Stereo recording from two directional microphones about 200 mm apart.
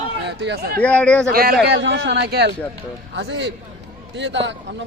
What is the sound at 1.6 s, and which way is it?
Speech, 60° right (ahead or behind).